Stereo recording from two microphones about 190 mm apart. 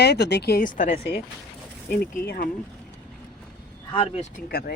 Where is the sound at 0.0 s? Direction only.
60° left (ahead or behind).